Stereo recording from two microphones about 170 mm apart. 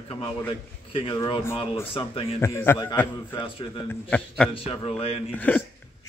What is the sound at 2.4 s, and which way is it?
Speech, 15° left (ahead or behind).